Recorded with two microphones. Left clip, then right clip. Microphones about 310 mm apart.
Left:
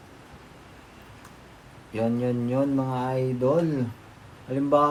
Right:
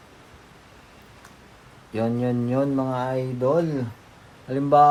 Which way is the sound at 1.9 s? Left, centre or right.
Right.